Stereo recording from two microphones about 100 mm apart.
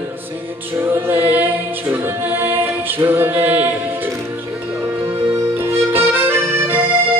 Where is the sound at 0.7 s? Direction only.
20° right (ahead or behind).